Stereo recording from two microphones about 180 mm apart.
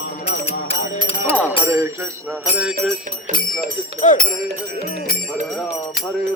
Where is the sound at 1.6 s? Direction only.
15° right (ahead or behind).